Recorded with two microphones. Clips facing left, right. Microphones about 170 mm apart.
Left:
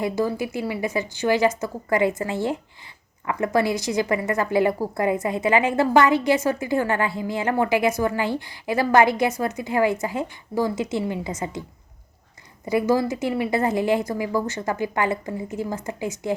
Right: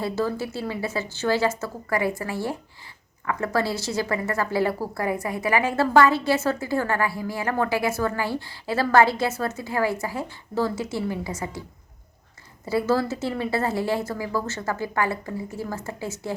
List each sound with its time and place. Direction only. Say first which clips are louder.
0.0 s a woman's voice: left 2 dB; 15° left (ahead or behind)
12.6 s a woman's voice: left 2 dB; 15° left (ahead or behind)